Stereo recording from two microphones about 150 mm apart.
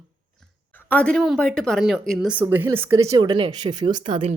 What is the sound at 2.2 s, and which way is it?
A woman's voice, 10° right (ahead or behind).